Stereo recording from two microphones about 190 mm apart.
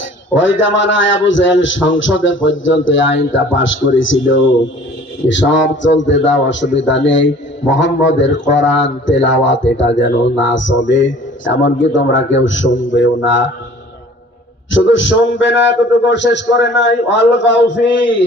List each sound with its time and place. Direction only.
0.3 s a man's voice: 75° left (ahead or behind)
5.2 s a man's voice: 70° left (ahead or behind)
14.7 s a man's voice: 75° left (ahead or behind)